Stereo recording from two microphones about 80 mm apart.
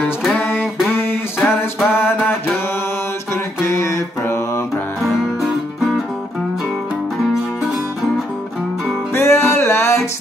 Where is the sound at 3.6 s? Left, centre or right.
Left.